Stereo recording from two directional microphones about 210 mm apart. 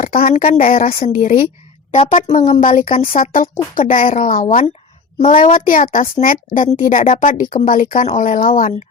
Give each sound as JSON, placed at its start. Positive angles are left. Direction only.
{"t": 0.0, "sound": "a child's voice", "side_deg": 40}